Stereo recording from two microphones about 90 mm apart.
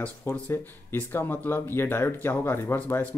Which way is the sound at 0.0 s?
20° left (ahead or behind).